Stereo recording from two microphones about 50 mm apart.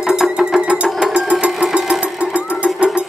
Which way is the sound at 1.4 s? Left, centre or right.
Centre.